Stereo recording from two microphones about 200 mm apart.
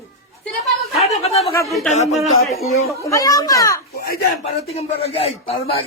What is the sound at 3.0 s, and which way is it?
Speech, 15° left (ahead or behind).